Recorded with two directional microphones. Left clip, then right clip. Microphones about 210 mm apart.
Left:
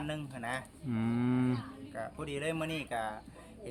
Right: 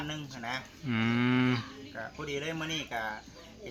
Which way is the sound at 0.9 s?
5° right (ahead or behind).